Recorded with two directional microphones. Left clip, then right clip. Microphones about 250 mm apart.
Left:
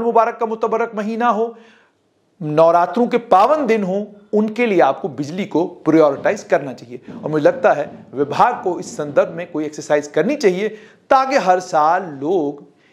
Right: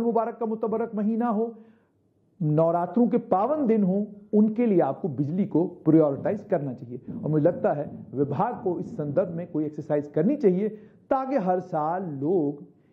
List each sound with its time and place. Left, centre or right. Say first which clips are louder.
0.0 s speech: left 10 dB; centre
12.3 s speech: left 6 dB; left